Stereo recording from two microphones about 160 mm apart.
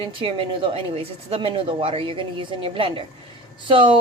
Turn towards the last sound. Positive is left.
turn(degrees=-30)  # may be behind; listen again after turning